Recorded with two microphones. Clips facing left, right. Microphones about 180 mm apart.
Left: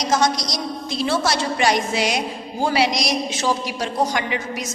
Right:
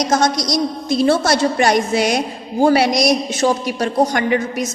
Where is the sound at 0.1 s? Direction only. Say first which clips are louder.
Right 4 dB; 50° right (ahead or behind).